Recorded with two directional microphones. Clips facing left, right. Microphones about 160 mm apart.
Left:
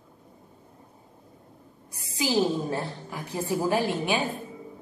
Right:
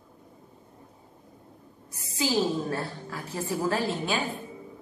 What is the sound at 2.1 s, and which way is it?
A woman's voice, 15° left (ahead or behind).